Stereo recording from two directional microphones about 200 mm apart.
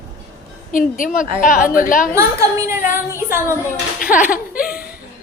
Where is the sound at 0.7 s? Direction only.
45° left (ahead or behind).